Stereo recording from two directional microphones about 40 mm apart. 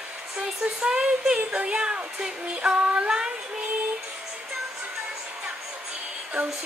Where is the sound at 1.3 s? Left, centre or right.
Right.